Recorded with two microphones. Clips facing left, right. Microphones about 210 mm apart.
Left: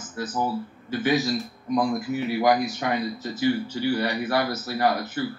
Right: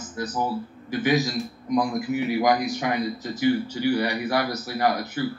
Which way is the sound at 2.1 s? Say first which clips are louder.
Right 1 dB; 15° right (ahead or behind).